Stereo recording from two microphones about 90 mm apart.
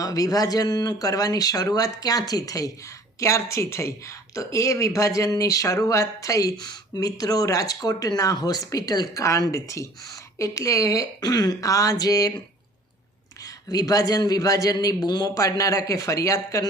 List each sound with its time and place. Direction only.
0.0 s speech: 40° left (ahead or behind)
13.4 s speech: 40° left (ahead or behind)